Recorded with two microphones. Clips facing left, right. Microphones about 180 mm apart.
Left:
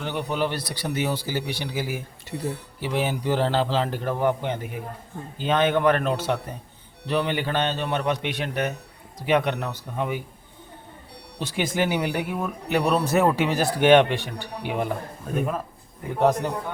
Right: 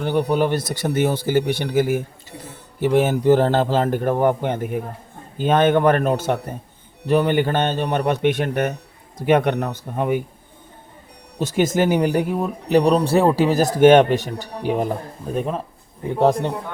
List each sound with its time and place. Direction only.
0.0 s speech: 45° right (ahead or behind)
11.3 s speech: 45° right (ahead or behind)